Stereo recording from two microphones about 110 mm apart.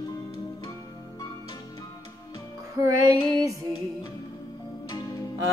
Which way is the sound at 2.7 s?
30° right (ahead or behind).